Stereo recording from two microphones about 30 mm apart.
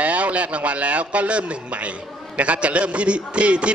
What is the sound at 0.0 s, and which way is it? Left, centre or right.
A man's voice, right.